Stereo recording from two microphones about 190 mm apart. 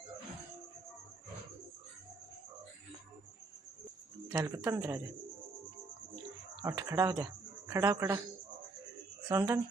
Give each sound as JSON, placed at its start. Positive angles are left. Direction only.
{"t": 4.3, "sound": "speech", "side_deg": -20}
{"t": 6.6, "sound": "speech", "side_deg": -15}
{"t": 9.3, "sound": "speech", "side_deg": -15}